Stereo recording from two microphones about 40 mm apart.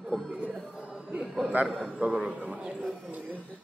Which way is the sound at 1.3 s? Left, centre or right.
Right.